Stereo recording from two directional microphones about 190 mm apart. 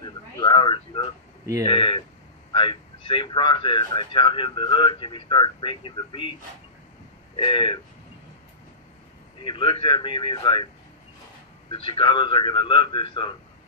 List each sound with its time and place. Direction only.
0.0 s a sound: 25° left (ahead or behind)
1.7 s a man's voice: 25° left (ahead or behind)
7.3 s a man's voice: 25° left (ahead or behind)
9.4 s a man's voice: 25° left (ahead or behind)
11.7 s a man's voice: 25° left (ahead or behind)